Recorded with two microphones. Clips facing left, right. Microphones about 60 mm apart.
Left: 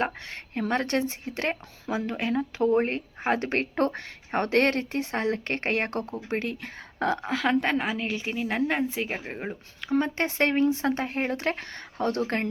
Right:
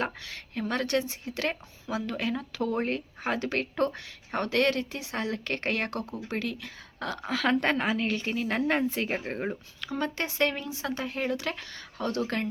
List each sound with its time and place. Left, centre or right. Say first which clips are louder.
0.0 s speech: left 3 dB; left
7.2 s a woman's voice: left 1 dB; centre
7.6 s a woman's voice: even; centre
10.0 s speech: left 1 dB; left